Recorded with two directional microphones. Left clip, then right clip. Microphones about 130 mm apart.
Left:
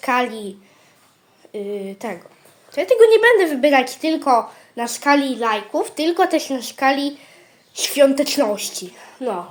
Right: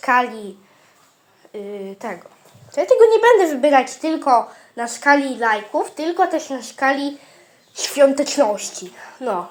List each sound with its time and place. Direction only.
0.0 s a woman's voice: 20° left (ahead or behind)
1.5 s a woman's voice: 30° left (ahead or behind)
2.7 s speech: 10° left (ahead or behind)
5.9 s speech: 40° left (ahead or behind)
6.7 s a woman's voice: 10° left (ahead or behind)